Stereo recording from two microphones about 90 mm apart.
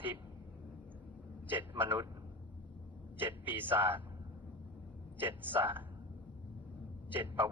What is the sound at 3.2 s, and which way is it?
Speech, 20° right (ahead or behind).